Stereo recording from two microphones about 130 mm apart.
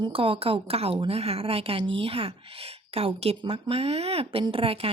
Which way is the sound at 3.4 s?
35° right (ahead or behind).